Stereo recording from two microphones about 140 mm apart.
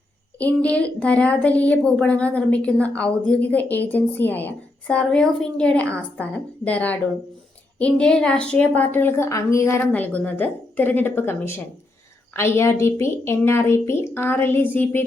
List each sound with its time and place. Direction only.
0.3 s a woman's voice: 10° left (ahead or behind)